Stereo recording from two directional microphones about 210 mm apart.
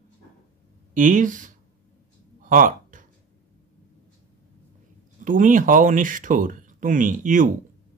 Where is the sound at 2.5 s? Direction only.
40° right (ahead or behind).